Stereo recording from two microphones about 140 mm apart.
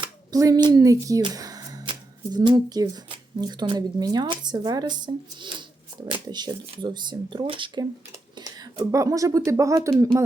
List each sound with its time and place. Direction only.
0.0 s speech: 25° right (ahead or behind)